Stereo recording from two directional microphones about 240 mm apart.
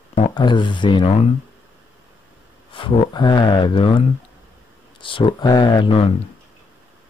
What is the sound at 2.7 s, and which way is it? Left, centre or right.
Speech, left.